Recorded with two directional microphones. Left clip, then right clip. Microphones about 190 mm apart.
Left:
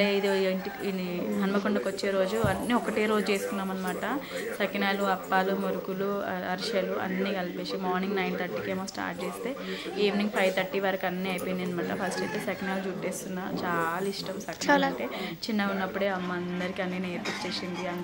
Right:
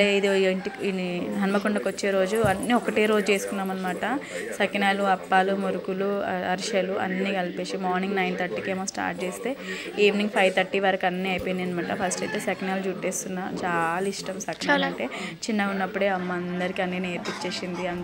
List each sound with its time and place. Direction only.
0.0 s a woman's voice: 15° right (ahead or behind)
9.9 s a woman's voice: 20° right (ahead or behind)
14.7 s a woman's voice: 5° left (ahead or behind)
15.5 s a woman's voice: 15° right (ahead or behind)